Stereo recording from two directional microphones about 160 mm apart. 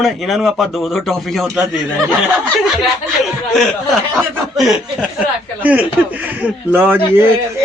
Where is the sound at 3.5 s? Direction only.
Centre (ahead or behind).